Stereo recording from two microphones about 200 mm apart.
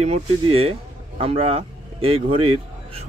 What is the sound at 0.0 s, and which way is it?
Speech, 30° right (ahead or behind).